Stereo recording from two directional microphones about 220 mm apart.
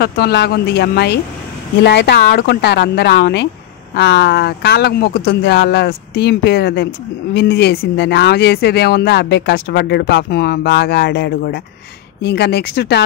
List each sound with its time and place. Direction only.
0.0 s speech: 45° left (ahead or behind)